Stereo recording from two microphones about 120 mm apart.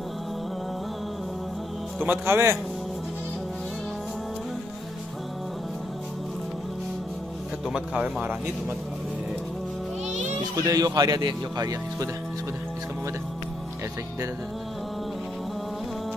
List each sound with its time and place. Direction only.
2.0 s a man's voice: 20° right (ahead or behind)
7.6 s speech: 5° right (ahead or behind)
10.5 s speech: 30° right (ahead or behind)